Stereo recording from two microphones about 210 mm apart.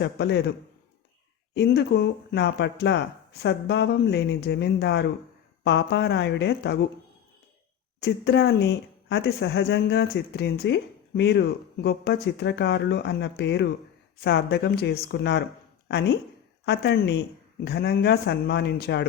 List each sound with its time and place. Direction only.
0.0 s speech: 55° left (ahead or behind)
1.5 s speech: 50° left (ahead or behind)
8.0 s speech: 50° left (ahead or behind)